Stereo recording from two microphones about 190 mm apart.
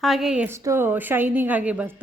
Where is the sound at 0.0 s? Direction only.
Centre (ahead or behind).